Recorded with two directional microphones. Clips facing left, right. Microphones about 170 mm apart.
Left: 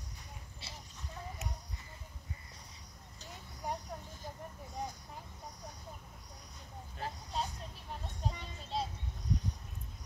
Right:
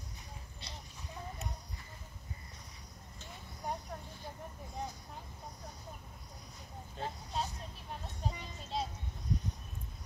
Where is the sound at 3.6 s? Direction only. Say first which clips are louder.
Even; 5° left (ahead or behind).